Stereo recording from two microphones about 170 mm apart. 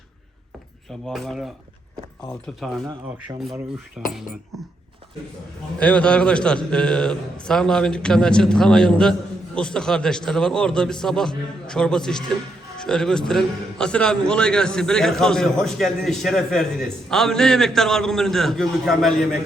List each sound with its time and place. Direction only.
1.0 s a man's voice: centre (ahead or behind)
2.6 s a man's voice: centre (ahead or behind)
2.8 s speech: 20° right (ahead or behind)
4.0 s a man's voice: 5° right (ahead or behind)
5.8 s a man's voice: 5° left (ahead or behind)